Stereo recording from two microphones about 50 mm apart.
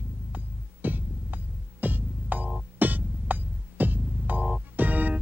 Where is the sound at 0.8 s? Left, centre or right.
Right.